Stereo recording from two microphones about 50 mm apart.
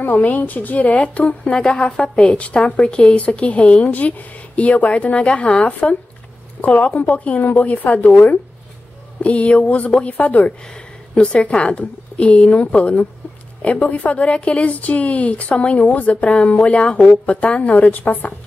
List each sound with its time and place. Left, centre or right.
0.0 s a woman's voice: left
1.4 s a woman's voice: centre
10.6 s a sound: centre
11.3 s a woman's voice: left